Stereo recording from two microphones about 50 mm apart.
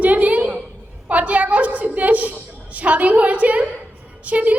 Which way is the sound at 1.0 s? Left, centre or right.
Right.